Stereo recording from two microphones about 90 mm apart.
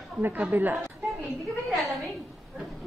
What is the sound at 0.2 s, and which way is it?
Speech, 20° right (ahead or behind).